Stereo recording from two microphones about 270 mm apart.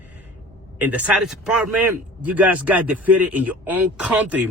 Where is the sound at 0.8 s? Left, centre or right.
Centre.